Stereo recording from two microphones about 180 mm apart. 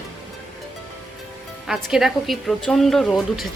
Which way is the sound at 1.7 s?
Centre (ahead or behind).